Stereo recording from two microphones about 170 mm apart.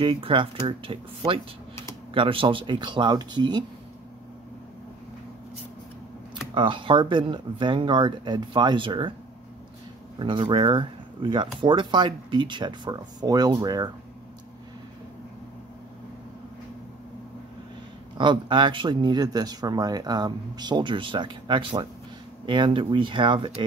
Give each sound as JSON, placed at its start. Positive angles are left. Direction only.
{"t": 0.0, "sound": "speech", "side_deg": -30}
{"t": 6.5, "sound": "speech", "side_deg": -30}
{"t": 10.1, "sound": "speech", "side_deg": -30}
{"t": 18.1, "sound": "speech", "side_deg": -25}